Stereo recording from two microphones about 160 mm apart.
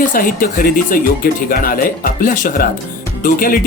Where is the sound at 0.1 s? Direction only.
60° left (ahead or behind).